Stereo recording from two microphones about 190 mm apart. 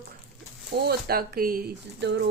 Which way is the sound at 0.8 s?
55° right (ahead or behind).